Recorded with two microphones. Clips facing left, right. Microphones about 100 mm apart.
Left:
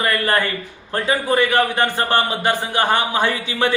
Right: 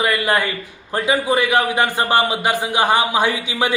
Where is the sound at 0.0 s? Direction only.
10° right (ahead or behind).